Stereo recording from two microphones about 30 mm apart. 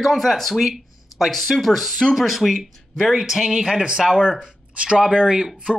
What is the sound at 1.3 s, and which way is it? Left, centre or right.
Speech, centre.